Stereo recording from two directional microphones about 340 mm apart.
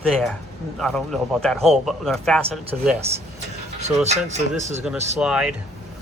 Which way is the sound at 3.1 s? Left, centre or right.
Centre.